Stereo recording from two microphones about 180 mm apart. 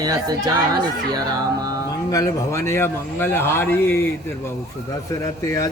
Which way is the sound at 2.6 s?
15° left (ahead or behind).